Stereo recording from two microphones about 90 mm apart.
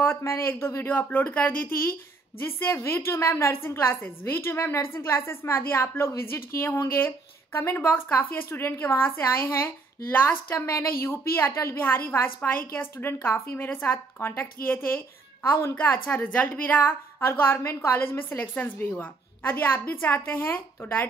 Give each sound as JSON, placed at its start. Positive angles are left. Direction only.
{"t": 0.0, "sound": "a woman's voice", "side_deg": 25}